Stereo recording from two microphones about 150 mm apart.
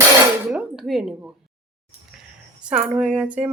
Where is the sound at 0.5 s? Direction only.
5° right (ahead or behind).